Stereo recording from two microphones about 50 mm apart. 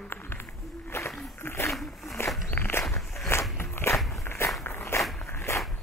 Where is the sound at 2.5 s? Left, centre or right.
Left.